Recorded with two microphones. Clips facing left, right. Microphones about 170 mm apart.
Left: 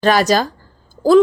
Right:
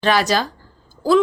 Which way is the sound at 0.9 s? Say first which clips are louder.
Left 4 dB; 45° left (ahead or behind).